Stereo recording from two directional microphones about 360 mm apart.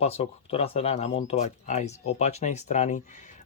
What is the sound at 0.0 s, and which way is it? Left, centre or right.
Speech, centre.